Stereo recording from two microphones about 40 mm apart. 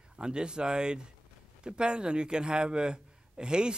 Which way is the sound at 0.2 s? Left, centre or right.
Right.